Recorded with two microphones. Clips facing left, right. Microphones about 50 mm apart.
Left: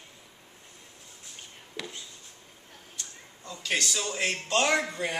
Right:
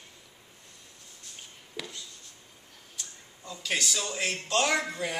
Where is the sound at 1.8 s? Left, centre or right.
Centre.